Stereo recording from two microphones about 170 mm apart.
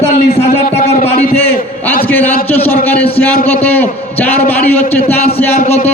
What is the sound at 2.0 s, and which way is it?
A man's voice, 10° left (ahead or behind).